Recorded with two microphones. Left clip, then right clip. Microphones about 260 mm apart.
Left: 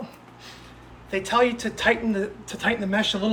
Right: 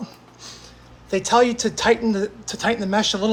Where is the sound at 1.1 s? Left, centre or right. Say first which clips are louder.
Right 4 dB; centre.